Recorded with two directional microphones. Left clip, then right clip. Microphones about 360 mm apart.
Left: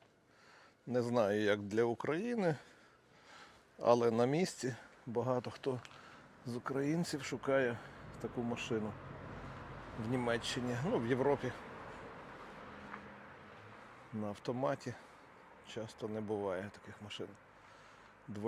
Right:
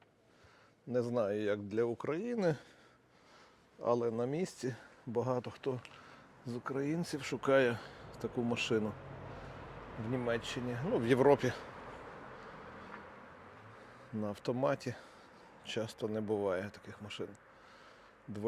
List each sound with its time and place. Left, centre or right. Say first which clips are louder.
0.9 s speech: left 1 dB; centre
3.8 s speech: left 3 dB; centre; by 8.8 s right
10.1 s speech: even; centre
11.0 s speech: right 9 dB; right
14.2 s speech: right 3 dB; right